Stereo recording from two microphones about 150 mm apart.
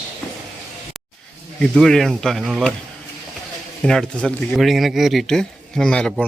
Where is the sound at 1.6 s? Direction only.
5° left (ahead or behind).